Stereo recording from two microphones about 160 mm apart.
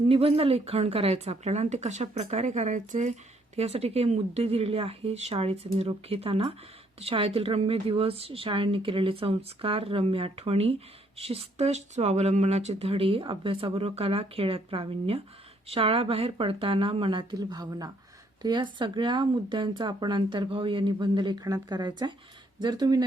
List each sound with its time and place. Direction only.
0.1 s speech: 35° right (ahead or behind)